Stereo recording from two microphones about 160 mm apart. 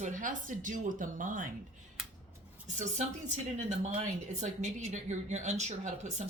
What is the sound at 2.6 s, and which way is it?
Speech, 45° right (ahead or behind).